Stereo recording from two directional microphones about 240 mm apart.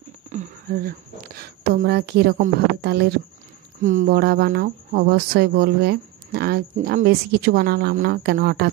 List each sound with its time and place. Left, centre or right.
0.3 s speech: right
3.8 s speech: right